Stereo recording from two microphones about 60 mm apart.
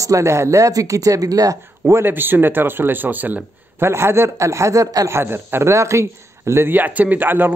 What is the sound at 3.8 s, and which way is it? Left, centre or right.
Speech, right.